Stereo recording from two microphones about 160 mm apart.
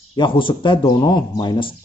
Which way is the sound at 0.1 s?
30° left (ahead or behind).